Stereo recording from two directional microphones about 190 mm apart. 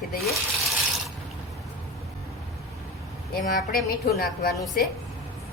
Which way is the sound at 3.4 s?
50° left (ahead or behind).